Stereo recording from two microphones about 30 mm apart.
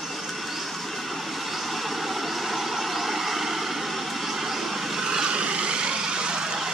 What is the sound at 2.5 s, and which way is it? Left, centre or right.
Vehicle, centre.